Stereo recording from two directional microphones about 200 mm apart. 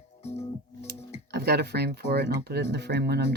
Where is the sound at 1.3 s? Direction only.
55° right (ahead or behind).